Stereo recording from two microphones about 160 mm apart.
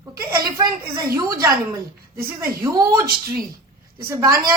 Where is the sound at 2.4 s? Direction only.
20° right (ahead or behind).